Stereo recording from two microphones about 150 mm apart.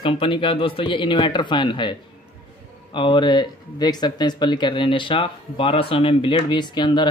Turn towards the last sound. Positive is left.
turn(degrees=30)  # may be behind; listen again after turning